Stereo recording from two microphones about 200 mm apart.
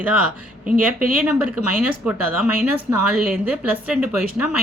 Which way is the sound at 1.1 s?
10° right (ahead or behind).